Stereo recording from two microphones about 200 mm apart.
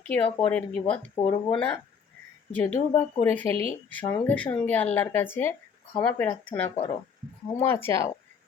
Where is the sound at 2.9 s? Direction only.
10° left (ahead or behind).